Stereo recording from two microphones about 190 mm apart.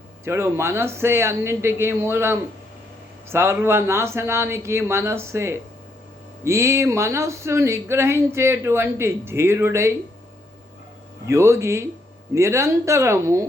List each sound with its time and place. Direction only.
0.3 s speech: 15° right (ahead or behind)
11.3 s speech: 15° right (ahead or behind)